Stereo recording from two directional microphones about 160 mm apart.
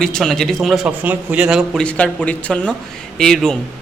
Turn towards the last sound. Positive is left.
turn(degrees=5)  # may be behind; listen again after turning